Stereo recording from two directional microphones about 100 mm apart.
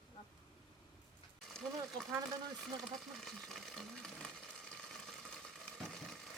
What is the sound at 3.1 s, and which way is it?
Speech, centre (ahead or behind).